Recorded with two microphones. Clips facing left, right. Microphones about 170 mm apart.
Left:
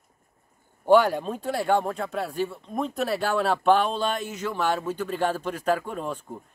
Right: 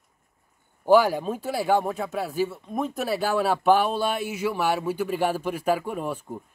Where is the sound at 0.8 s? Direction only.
5° right (ahead or behind).